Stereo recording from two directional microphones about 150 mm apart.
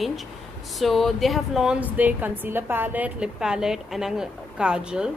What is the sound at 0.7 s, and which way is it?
A woman's voice, centre (ahead or behind).